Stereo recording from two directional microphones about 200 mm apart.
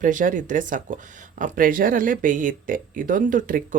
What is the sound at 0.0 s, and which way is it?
Speech, 40° right (ahead or behind).